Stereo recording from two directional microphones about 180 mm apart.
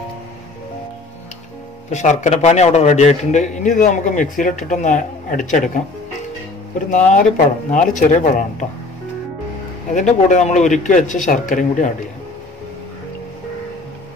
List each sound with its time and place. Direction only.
1.9 s a man's voice: 40° left (ahead or behind)
6.9 s a man's voice: 45° left (ahead or behind)
9.9 s a man's voice: 45° left (ahead or behind)